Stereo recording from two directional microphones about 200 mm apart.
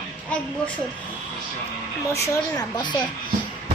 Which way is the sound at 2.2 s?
15° left (ahead or behind).